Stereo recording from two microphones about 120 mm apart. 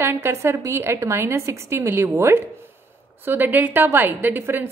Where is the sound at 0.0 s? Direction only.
20° right (ahead or behind).